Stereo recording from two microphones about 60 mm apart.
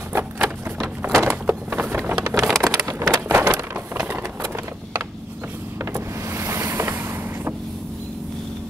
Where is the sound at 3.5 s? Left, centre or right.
Right.